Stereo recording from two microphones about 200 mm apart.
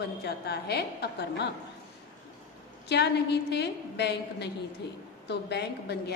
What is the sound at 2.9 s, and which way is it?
A woman's voice, 55° left (ahead or behind).